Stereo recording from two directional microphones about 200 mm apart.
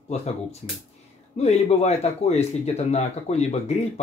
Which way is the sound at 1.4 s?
30° left (ahead or behind).